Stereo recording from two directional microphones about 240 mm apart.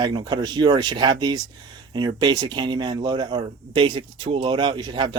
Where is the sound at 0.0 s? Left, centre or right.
Centre.